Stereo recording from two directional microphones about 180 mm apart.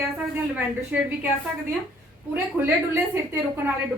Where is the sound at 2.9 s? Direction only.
15° right (ahead or behind).